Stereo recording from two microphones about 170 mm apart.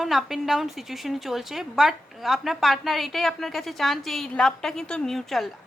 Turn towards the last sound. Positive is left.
turn(degrees=0)  # may be behind; listen again after turning